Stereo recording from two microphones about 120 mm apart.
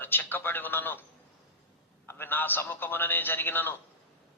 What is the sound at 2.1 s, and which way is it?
A man's voice, 15° left (ahead or behind).